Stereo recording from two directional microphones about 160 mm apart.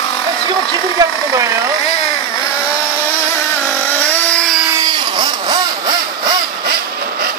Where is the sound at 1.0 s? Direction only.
20° right (ahead or behind).